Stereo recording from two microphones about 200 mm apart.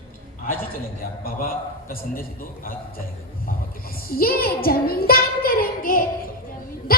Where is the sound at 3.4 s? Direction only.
45° left (ahead or behind).